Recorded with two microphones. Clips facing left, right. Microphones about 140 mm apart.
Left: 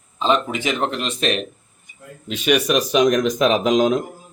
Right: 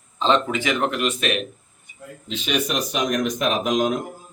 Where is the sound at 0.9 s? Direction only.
30° left (ahead or behind).